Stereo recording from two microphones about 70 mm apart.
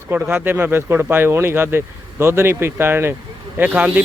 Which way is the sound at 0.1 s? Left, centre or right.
Right.